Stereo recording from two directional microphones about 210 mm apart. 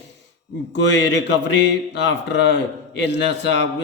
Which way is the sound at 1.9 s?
60° left (ahead or behind).